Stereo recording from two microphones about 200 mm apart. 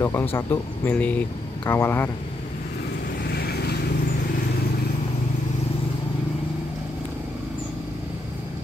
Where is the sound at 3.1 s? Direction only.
50° left (ahead or behind).